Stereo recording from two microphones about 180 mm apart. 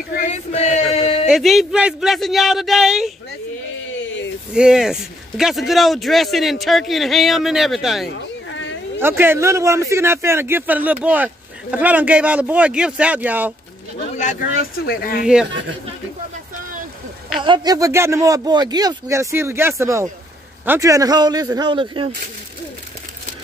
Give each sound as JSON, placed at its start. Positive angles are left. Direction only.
{"t": 0.1, "sound": "male singing", "side_deg": 40}
{"t": 1.3, "sound": "a man's voice", "side_deg": 0}
{"t": 4.6, "sound": "a man's voice", "side_deg": -5}
{"t": 8.1, "sound": "a sound", "side_deg": 90}
{"t": 9.0, "sound": "a man's voice", "side_deg": -15}
{"t": 14.6, "sound": "speech", "side_deg": 55}
{"t": 17.4, "sound": "a man's voice", "side_deg": -25}